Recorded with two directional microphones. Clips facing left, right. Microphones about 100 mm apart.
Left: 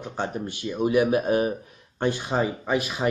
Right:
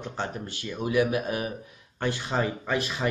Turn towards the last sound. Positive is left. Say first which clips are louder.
# left 3 dB
turn(degrees=15)  # may be behind; listen again after turning